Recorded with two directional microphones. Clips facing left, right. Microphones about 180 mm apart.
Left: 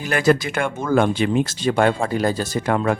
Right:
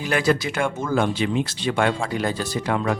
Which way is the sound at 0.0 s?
45° left (ahead or behind).